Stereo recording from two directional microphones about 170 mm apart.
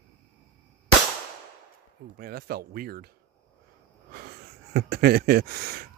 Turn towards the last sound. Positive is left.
turn(degrees=-65)  # may be behind; listen again after turning